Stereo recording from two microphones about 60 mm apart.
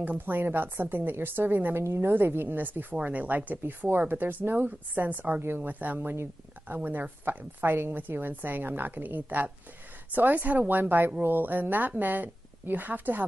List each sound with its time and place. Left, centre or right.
0.0 s a woman's voice: right
1.8 s a woman's voice: right